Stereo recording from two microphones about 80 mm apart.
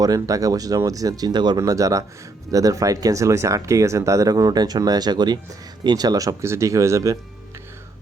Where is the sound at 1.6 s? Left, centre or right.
Right.